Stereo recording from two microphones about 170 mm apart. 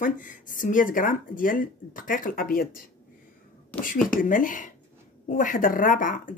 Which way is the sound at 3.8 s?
55° left (ahead or behind).